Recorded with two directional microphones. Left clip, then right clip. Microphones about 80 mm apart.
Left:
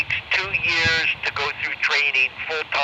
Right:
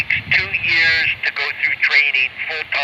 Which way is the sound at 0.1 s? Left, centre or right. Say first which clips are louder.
Right 5 dB; left.